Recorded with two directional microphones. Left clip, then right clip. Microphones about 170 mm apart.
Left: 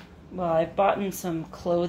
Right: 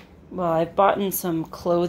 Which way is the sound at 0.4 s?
45° right (ahead or behind).